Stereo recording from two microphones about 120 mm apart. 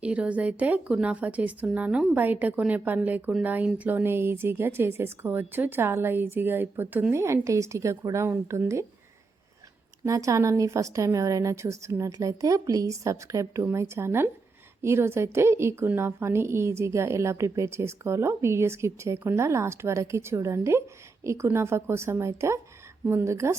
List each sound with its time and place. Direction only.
0.0 s a woman's voice: 10° right (ahead or behind)
10.0 s a woman's voice: 25° right (ahead or behind)